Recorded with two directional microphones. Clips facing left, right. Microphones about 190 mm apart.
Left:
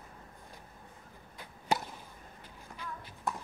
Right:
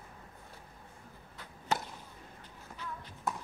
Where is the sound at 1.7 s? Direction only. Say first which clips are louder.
Left 2 dB; 10° left (ahead or behind).